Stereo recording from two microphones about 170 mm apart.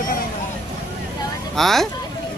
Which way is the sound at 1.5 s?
Centre (ahead or behind).